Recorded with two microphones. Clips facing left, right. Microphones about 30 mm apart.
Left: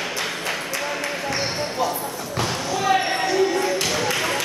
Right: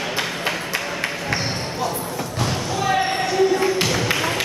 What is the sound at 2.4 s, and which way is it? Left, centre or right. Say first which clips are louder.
Basketball bounce: even; centre.